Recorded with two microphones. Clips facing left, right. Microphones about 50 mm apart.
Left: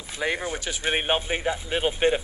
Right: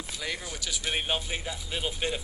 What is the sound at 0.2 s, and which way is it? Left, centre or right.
A man's voice, left.